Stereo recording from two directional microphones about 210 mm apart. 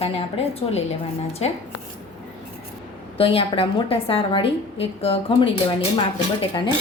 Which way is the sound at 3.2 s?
25° left (ahead or behind).